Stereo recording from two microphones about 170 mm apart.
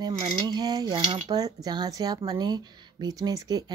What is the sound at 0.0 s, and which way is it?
Speech, 25° right (ahead or behind).